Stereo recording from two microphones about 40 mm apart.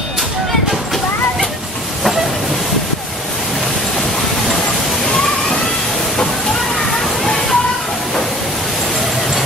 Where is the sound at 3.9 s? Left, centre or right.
Centre.